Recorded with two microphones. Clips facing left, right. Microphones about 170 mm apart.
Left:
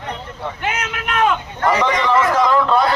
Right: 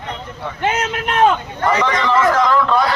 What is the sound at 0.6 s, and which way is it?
Vehicle, 30° right (ahead or behind).